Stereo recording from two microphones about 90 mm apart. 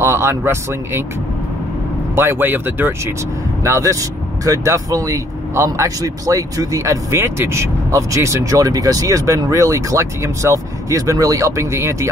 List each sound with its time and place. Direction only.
0.0 s speech: 30° right (ahead or behind)
2.1 s speech: 25° right (ahead or behind)
3.6 s speech: 35° right (ahead or behind)